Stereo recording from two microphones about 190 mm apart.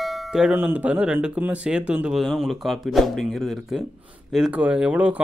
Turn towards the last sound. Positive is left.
turn(degrees=-10)  # may be behind; listen again after turning